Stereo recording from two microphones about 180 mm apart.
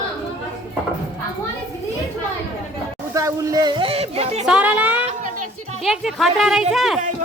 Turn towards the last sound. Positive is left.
turn(degrees=0)  # may be behind; listen again after turning